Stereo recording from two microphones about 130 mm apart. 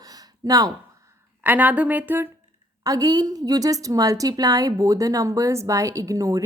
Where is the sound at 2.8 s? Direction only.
30° right (ahead or behind).